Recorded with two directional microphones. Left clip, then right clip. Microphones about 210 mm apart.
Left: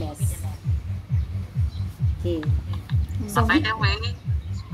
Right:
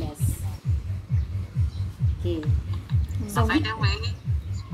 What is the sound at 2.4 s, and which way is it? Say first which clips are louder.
A woman's voice: left 2 dB; 35° left (ahead or behind).